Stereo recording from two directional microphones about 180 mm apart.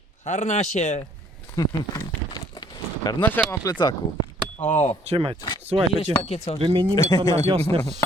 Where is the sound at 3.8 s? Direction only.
25° left (ahead or behind).